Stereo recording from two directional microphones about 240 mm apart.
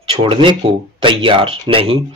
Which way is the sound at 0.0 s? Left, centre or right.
Right.